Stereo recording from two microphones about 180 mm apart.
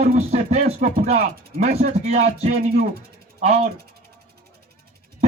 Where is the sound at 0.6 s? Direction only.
50° right (ahead or behind).